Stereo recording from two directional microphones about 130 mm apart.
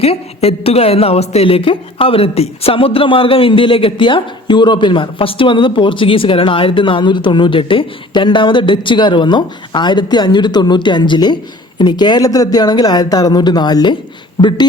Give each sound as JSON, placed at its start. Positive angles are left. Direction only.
{"t": 0.0, "sound": "a woman's voice", "side_deg": 50}